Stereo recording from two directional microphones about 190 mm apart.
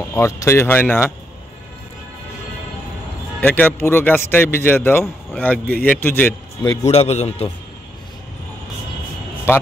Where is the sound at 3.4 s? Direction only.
10° left (ahead or behind).